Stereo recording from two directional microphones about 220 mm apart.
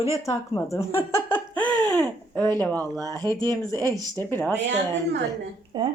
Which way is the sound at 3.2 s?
20° right (ahead or behind).